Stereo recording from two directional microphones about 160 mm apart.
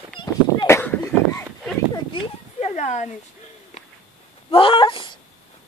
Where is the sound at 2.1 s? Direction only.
45° left (ahead or behind).